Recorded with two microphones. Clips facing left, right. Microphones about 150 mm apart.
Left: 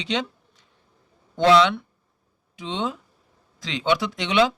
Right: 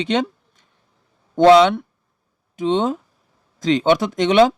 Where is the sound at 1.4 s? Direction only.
50° right (ahead or behind).